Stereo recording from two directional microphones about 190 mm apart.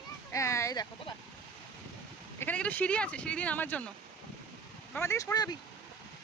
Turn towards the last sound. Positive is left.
turn(degrees=20)  # may be behind; listen again after turning